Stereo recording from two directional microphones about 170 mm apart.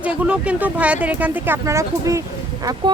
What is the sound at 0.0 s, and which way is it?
Speech, 5° right (ahead or behind).